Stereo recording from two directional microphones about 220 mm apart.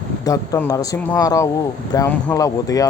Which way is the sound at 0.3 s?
15° left (ahead or behind).